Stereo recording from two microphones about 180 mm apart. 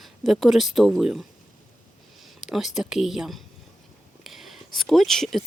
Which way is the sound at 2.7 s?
Centre (ahead or behind).